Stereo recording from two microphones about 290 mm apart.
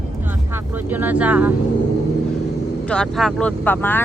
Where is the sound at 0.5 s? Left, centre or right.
Centre.